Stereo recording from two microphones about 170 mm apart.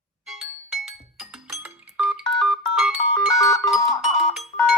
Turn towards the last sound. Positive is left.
turn(degrees=0)  # may be behind; listen again after turning